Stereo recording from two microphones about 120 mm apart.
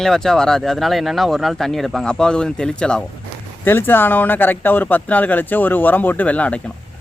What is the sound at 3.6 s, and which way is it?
Speech, 15° left (ahead or behind).